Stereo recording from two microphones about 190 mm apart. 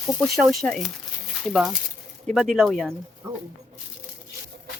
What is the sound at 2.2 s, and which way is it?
Speech, 5° left (ahead or behind).